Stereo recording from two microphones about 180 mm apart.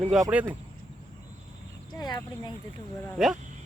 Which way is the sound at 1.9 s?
20° left (ahead or behind).